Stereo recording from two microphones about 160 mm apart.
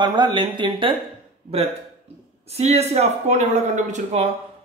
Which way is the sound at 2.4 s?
40° right (ahead or behind).